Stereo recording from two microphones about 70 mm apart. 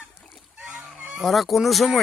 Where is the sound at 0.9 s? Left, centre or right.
Centre.